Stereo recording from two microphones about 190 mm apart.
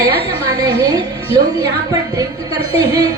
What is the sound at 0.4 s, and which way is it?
A woman's voice, 20° right (ahead or behind).